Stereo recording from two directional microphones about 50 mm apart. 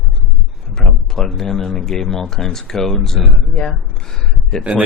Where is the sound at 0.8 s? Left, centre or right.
Centre.